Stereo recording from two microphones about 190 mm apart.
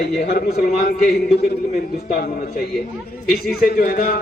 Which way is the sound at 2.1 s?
55° left (ahead or behind).